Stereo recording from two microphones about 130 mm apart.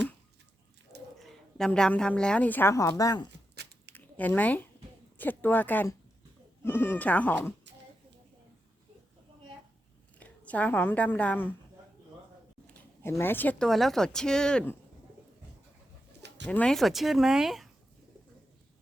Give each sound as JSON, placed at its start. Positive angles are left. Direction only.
{"t": 1.2, "sound": "a woman's voice", "side_deg": 5}
{"t": 3.9, "sound": "speech", "side_deg": 15}
{"t": 10.2, "sound": "a woman's voice", "side_deg": 10}
{"t": 12.6, "sound": "a sound", "side_deg": 20}
{"t": 13.7, "sound": "speech", "side_deg": 0}
{"t": 16.5, "sound": "speech", "side_deg": 5}